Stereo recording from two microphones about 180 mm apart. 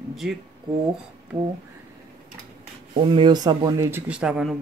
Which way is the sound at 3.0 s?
30° right (ahead or behind).